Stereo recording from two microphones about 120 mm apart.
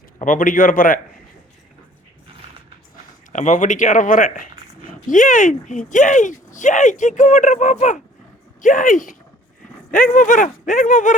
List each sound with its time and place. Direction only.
0.2 s a man's voice: 90° left
3.3 s speech: 90° left